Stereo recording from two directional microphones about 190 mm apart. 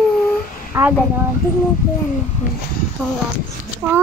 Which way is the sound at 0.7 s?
10° right (ahead or behind).